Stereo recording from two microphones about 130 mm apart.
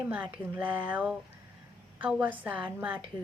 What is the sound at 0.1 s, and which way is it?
Speech, 15° right (ahead or behind).